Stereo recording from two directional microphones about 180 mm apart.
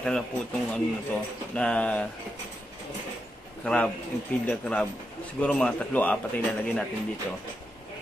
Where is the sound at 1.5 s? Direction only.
5° left (ahead or behind).